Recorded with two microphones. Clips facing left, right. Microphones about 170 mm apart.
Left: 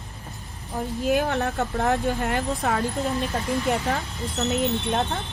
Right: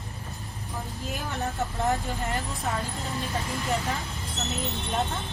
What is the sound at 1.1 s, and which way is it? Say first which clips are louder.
Speech: left 10 dB; 70° left (ahead or behind).